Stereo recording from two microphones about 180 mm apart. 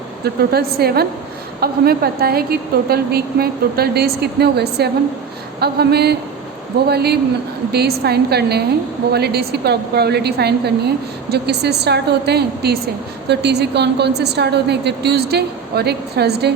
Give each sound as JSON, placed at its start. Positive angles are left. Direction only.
{"t": 0.5, "sound": "a woman's voice", "side_deg": -60}